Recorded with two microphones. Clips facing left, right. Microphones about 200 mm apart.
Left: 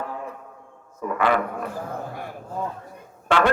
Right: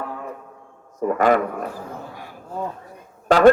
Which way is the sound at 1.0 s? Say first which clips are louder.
Right 7 dB; 45° right (ahead or behind).